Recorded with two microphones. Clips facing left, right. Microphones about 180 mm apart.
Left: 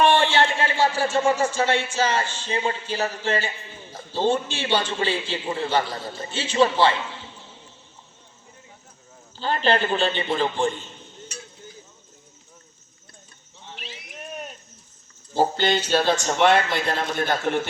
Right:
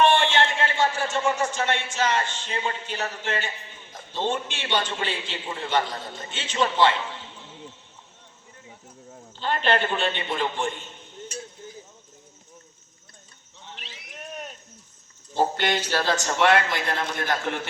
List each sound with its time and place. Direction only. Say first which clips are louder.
0.0 s a sound: left 1 dB; 35° left (ahead or behind)
0.3 s a man's voice: left 2 dB; 35° left (ahead or behind)
9.4 s a man's voice: left 2 dB; 35° left (ahead or behind)
15.4 s a man's voice: left 3 dB; 30° left (ahead or behind)